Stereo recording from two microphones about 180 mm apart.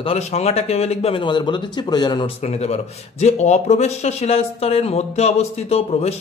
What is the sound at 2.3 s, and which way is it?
Speech, 35° left (ahead or behind).